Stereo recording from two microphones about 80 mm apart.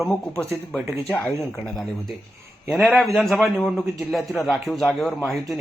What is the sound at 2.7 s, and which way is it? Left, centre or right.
Speech, centre.